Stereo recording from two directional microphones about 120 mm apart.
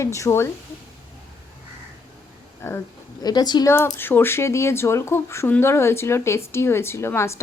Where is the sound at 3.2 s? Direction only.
35° left (ahead or behind).